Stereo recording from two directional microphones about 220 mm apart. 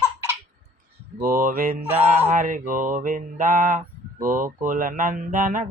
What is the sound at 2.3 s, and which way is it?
Mantra, 35° right (ahead or behind).